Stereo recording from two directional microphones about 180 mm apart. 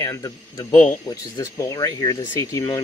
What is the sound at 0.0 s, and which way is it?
Speech, 20° left (ahead or behind).